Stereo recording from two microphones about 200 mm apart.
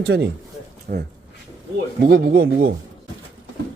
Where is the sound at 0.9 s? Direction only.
45° right (ahead or behind).